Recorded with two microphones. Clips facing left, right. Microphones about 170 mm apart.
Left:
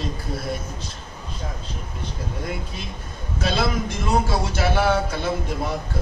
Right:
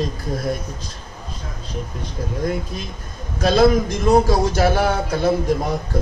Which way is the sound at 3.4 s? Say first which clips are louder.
Right 9 dB; 40° right (ahead or behind).